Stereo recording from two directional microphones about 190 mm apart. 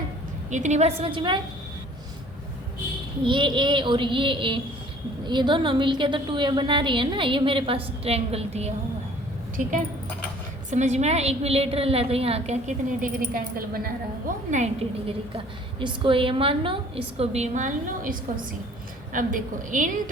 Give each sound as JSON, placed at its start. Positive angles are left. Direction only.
{"t": 0.5, "sound": "a woman's voice", "side_deg": -40}
{"t": 3.2, "sound": "a woman's voice", "side_deg": -25}
{"t": 10.7, "sound": "a woman's voice", "side_deg": -40}
{"t": 14.5, "sound": "a woman's voice", "side_deg": -35}
{"t": 15.8, "sound": "a woman's voice", "side_deg": -25}